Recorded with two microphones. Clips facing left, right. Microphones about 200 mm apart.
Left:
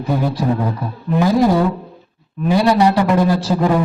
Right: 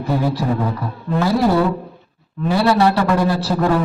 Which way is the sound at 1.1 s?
15° left (ahead or behind).